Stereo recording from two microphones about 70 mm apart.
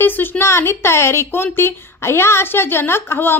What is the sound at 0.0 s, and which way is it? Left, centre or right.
A woman's voice, left.